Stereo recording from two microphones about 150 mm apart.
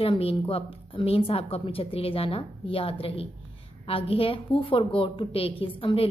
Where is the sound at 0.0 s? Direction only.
35° left (ahead or behind).